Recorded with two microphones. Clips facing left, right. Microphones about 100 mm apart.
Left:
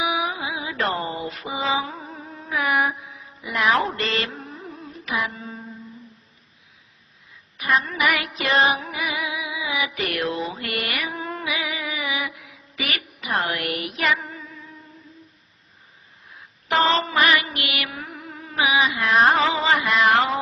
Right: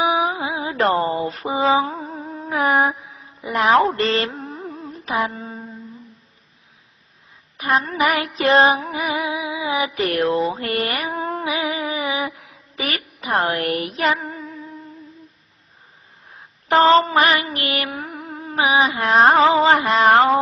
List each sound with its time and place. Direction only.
0.0 s mantra: 35° right (ahead or behind)
3.4 s a sound: 35° right (ahead or behind)
7.8 s music: 35° right (ahead or behind)
16.6 s mantra: 35° right (ahead or behind)